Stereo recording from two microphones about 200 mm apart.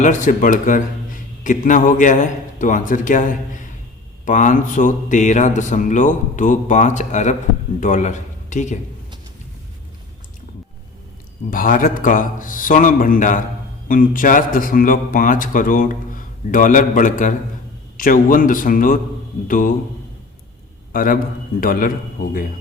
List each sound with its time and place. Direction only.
0.0 s a man's voice: 40° left (ahead or behind)
11.5 s a man's voice: 45° left (ahead or behind)
20.9 s a man's voice: 45° left (ahead or behind)